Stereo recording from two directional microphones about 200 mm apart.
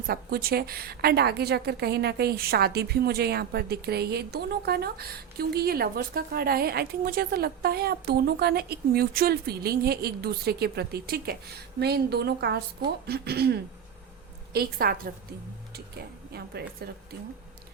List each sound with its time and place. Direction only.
0.1 s a woman's voice: 50° right (ahead or behind)